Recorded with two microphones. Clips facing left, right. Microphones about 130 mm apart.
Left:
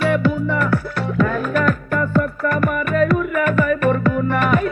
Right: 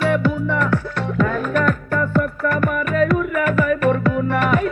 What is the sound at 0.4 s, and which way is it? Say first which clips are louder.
Music: even; 10° left (ahead or behind).